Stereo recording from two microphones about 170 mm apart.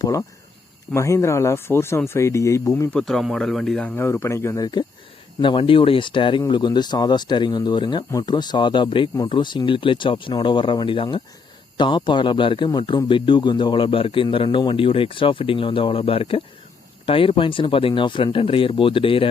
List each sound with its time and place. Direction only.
0.0 s speech: 20° left (ahead or behind)
2.9 s speech: centre (ahead or behind); by 19.3 s 30° left (ahead or behind)